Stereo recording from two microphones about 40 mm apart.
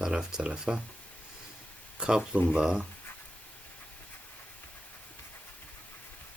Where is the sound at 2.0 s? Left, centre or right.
Right.